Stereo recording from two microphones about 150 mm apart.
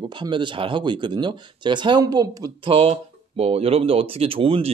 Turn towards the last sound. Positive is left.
turn(degrees=-40)  # may be behind; listen again after turning